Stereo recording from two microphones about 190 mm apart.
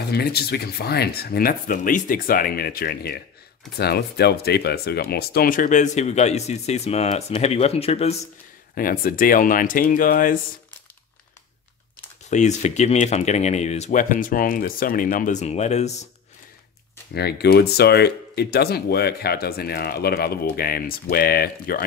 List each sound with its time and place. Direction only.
0.1 s speech: 55° left (ahead or behind); by 8.3 s 35° left (ahead or behind)
8.7 s speech: 50° left (ahead or behind)
12.3 s speech: 40° left (ahead or behind)
17.1 s speech: 60° left (ahead or behind)